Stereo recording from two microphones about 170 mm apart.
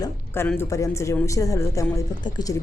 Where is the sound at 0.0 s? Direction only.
15° left (ahead or behind).